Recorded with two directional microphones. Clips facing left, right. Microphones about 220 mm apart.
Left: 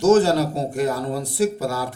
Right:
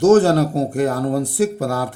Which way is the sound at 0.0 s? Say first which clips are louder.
Right 3 dB; 55° right (ahead or behind).